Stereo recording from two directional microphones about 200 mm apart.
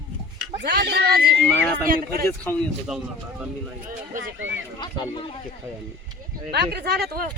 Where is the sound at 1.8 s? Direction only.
45° right (ahead or behind).